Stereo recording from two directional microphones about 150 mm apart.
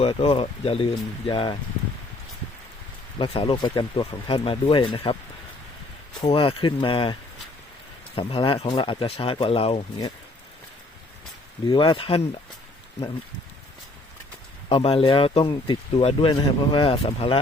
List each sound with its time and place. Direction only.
0.0 s speech: 40° left (ahead or behind)
3.2 s speech: 35° left (ahead or behind)
6.2 s speech: 35° left (ahead or behind)
11.7 s speech: 30° left (ahead or behind)
14.7 s speech: 35° left (ahead or behind)